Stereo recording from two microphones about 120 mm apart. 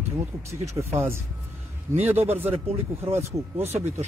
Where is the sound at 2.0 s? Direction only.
15° right (ahead or behind).